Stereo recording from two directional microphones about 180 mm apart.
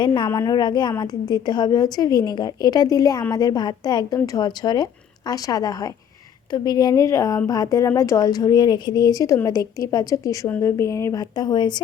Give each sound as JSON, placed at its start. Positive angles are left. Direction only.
{"t": 0.0, "sound": "speech", "side_deg": 25}